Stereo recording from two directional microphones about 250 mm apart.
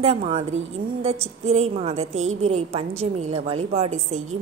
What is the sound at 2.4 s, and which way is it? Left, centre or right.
A woman's voice, right.